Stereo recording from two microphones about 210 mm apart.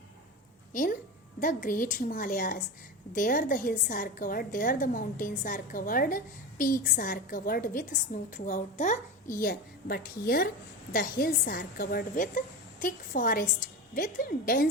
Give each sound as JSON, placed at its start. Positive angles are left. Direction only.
{"t": 0.7, "sound": "a woman's voice", "side_deg": 40}